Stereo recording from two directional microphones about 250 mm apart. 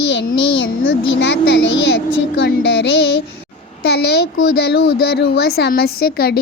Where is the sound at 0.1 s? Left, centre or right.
Left.